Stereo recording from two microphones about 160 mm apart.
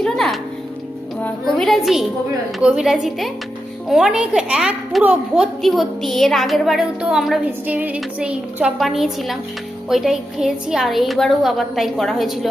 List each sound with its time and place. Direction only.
0.0 s music: centre (ahead or behind)
2.6 s a woman's voice: 5° right (ahead or behind)